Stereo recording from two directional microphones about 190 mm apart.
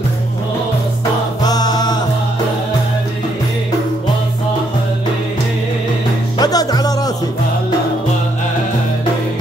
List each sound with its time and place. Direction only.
1.4 s music: 20° left (ahead or behind)
6.3 s music: 20° left (ahead or behind)